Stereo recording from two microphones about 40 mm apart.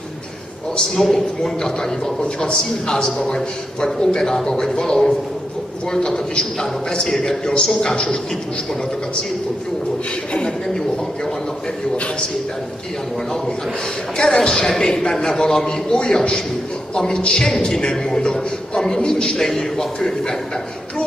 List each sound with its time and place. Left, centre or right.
0.9 s a man's voice: centre
10.3 s a man's voice: left
14.1 s a man's voice: left
19.3 s a man's voice: centre